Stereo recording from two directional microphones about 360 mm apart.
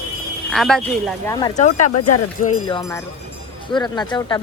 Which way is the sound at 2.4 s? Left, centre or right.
Left.